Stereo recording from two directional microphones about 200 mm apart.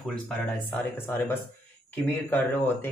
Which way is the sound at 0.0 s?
Centre (ahead or behind).